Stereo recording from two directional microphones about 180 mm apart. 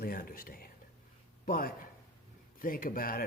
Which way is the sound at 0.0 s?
55° left (ahead or behind).